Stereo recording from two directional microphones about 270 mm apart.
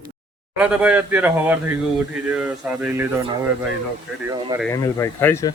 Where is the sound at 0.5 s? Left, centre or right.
Centre.